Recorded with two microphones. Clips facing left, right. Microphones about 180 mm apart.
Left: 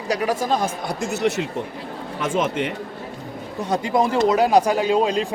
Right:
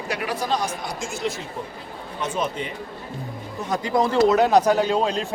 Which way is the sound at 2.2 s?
90° left.